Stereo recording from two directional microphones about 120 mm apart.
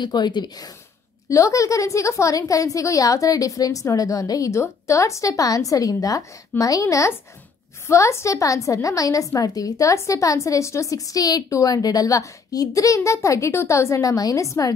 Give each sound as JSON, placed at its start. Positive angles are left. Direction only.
{"t": 0.0, "sound": "a woman's voice", "side_deg": 40}